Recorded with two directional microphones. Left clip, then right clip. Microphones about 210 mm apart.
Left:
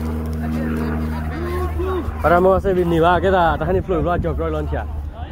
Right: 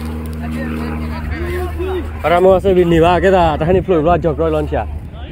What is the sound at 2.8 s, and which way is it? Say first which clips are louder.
Speech: right 4 dB; 40° right (ahead or behind).